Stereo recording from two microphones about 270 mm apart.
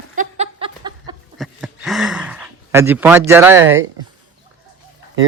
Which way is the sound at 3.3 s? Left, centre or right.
Centre.